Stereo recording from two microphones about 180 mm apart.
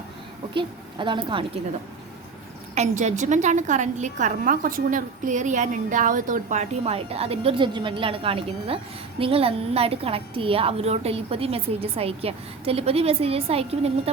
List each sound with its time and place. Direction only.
0.5 s a woman's voice: 25° right (ahead or behind)
2.7 s a woman's voice: 40° right (ahead or behind)